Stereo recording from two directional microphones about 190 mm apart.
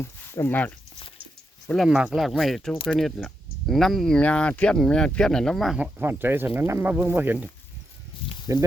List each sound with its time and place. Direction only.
0.0 s speech: 15° left (ahead or behind); by 7.4 s 10° right (ahead or behind)
8.5 s speech: 15° right (ahead or behind)